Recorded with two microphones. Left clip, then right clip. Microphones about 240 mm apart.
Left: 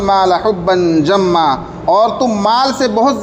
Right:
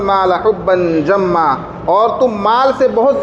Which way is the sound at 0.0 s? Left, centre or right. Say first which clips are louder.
Left 1 dB; left.